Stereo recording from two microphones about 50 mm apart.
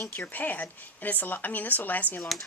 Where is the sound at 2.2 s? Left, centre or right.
Centre.